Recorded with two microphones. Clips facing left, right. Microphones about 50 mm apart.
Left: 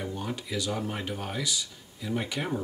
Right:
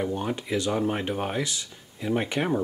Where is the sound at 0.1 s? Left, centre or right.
Right.